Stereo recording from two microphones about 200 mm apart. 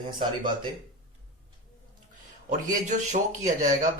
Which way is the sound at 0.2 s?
25° right (ahead or behind).